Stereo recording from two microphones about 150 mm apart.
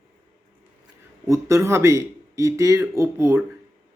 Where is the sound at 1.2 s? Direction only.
20° right (ahead or behind).